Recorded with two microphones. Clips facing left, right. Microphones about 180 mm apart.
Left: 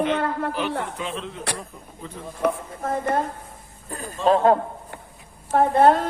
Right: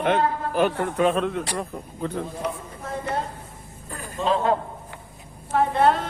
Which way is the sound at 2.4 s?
50° left (ahead or behind).